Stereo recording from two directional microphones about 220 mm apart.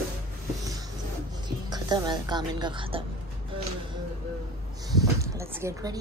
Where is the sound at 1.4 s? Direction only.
20° right (ahead or behind).